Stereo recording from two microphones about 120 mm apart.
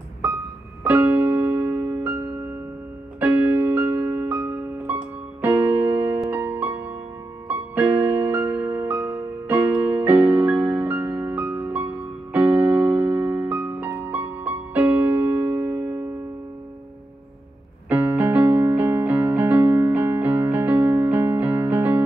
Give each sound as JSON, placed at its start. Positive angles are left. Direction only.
{"t": 0.8, "sound": "keyboard", "side_deg": -15}
{"t": 3.2, "sound": "music", "side_deg": -15}
{"t": 17.8, "sound": "electric piano", "side_deg": -15}